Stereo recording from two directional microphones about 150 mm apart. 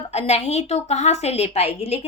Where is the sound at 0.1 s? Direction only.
45° left (ahead or behind).